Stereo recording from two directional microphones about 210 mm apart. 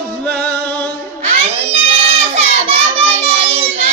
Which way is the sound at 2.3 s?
30° right (ahead or behind).